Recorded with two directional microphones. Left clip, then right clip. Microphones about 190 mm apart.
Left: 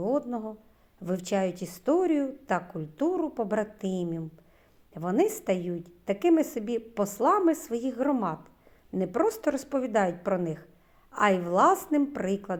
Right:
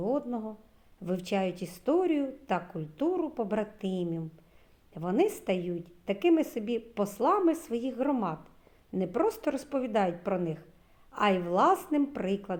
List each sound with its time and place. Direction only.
0.0 s a woman's voice: 25° left (ahead or behind)